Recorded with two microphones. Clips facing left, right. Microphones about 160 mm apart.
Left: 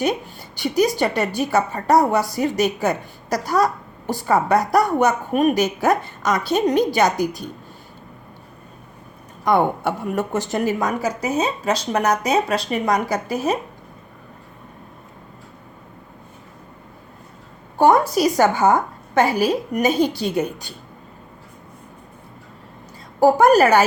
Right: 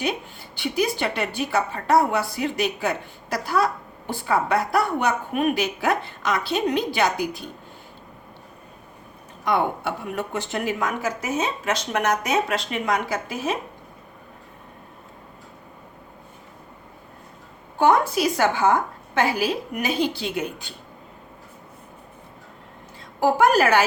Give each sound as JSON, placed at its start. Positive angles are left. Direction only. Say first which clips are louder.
{"t": 0.0, "sound": "a woman's voice", "louder": "left 5 dB", "side_deg": 40}
{"t": 9.4, "sound": "a woman's voice", "louder": "left 5 dB", "side_deg": 45}
{"t": 17.7, "sound": "a woman's voice", "louder": "left 4 dB", "side_deg": 40}
{"t": 23.2, "sound": "a woman's voice", "louder": "left 5 dB", "side_deg": 40}